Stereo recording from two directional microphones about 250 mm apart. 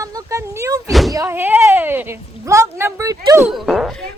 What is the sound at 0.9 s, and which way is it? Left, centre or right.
Speech, centre.